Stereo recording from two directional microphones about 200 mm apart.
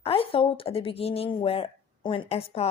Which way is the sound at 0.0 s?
30° left (ahead or behind).